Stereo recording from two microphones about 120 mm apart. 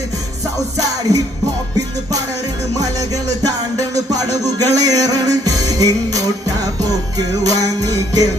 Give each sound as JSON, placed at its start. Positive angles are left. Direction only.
{"t": 2.7, "sound": "music", "side_deg": -30}